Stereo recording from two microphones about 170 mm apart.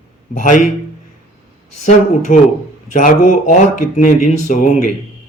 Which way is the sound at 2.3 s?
50° left (ahead or behind).